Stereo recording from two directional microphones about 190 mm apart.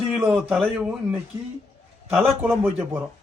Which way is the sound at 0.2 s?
15° right (ahead or behind).